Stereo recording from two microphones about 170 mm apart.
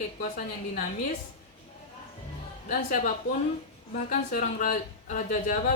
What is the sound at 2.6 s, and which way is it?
A woman's voice, 50° left (ahead or behind).